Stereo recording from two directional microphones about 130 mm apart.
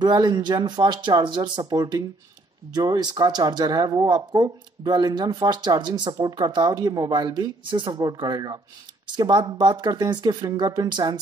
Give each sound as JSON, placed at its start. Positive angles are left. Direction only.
{"t": 0.0, "sound": "speech", "side_deg": -35}